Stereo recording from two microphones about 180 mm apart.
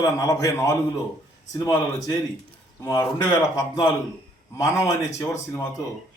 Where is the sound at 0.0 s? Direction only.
20° left (ahead or behind).